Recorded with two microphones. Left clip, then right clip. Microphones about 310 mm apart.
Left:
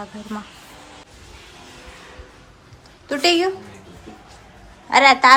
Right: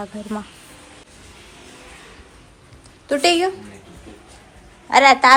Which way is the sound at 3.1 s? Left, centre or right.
Centre.